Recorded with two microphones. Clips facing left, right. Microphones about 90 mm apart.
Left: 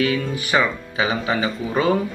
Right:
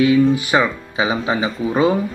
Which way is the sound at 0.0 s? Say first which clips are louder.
Right 8 dB; 20° right (ahead or behind).